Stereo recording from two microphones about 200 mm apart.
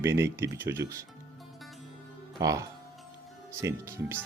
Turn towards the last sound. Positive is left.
turn(degrees=-10)  # may be behind; listen again after turning